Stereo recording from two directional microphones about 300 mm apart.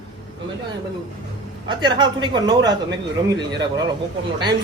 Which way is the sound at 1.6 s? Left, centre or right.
Centre.